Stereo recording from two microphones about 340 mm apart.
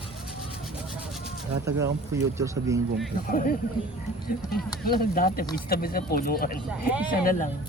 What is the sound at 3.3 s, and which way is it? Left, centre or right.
Speech, left.